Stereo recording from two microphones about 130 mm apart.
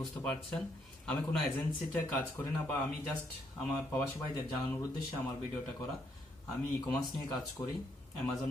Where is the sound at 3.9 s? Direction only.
15° left (ahead or behind).